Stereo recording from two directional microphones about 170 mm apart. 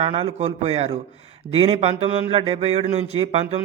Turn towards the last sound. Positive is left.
turn(degrees=-35)  # may be behind; listen again after turning